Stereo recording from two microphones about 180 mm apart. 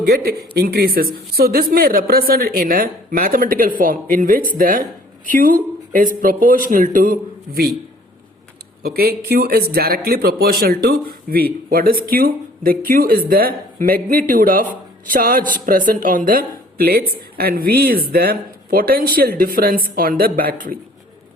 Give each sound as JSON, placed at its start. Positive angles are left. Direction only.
{"t": 0.0, "sound": "a woman's voice", "side_deg": -60}
{"t": 8.8, "sound": "speech", "side_deg": -60}